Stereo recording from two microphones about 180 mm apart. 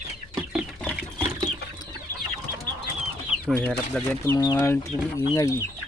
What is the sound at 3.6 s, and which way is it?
Speech, 5° left (ahead or behind).